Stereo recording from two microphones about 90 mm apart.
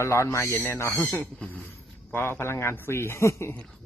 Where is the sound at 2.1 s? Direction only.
25° left (ahead or behind).